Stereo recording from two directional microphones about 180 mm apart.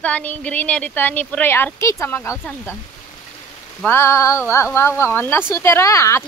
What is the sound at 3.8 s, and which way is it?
Speech, 15° left (ahead or behind).